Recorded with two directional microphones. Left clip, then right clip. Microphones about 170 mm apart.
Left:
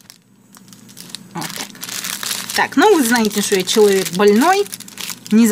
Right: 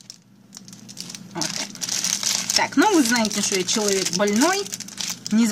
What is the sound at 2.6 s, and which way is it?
Speech, 45° left (ahead or behind).